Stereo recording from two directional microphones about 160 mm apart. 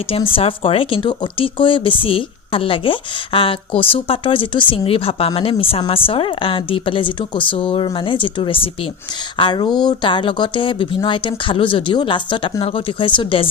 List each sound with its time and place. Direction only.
0.1 s speech: 35° left (ahead or behind)